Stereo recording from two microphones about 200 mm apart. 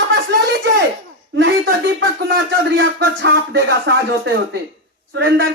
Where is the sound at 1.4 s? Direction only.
65° right (ahead or behind).